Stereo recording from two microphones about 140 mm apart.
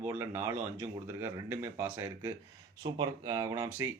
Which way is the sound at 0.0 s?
20° right (ahead or behind).